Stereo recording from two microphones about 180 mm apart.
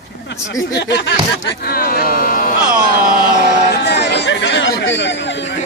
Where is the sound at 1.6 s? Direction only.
55° left (ahead or behind).